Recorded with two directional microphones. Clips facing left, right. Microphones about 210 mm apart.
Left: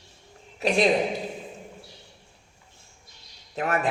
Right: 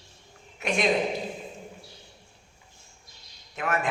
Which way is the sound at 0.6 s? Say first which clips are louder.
Left 5 dB; 35° left (ahead or behind).